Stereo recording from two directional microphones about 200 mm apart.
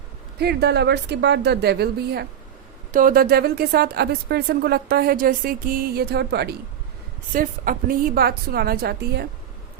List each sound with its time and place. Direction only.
0.3 s a woman's voice: 55° right (ahead or behind)
2.9 s speech: 45° right (ahead or behind)
7.3 s speech: 45° right (ahead or behind)